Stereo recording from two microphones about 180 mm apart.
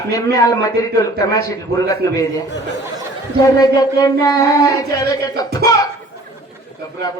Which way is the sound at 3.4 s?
20° left (ahead or behind).